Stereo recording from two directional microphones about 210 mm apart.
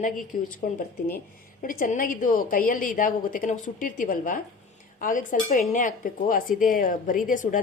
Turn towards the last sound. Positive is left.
turn(degrees=40)  # may be behind; listen again after turning